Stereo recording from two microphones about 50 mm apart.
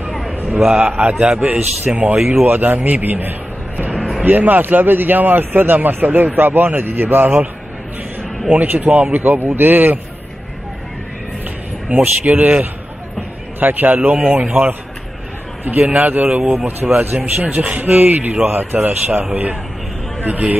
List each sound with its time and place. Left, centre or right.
0.7 s a man's voice: right
2.4 s speech: right
8.5 s speech: right
12.2 s speech: right
14.5 s a man's voice: right
20.2 s a man's voice: right